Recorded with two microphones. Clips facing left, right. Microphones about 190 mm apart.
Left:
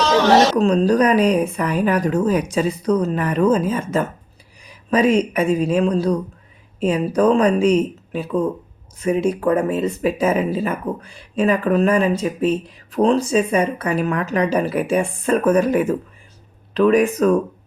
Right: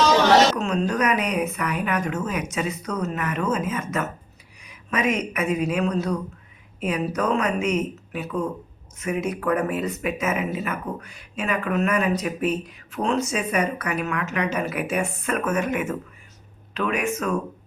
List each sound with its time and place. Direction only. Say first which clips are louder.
0.5 s speech: left 8 dB; 35° left (ahead or behind)